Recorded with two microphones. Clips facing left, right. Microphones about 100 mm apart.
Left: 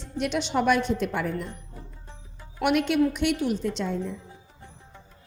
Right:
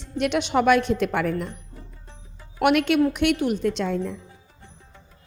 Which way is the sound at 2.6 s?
70° right (ahead or behind).